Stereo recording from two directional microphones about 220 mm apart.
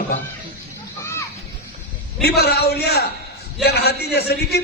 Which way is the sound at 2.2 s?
50° left (ahead or behind).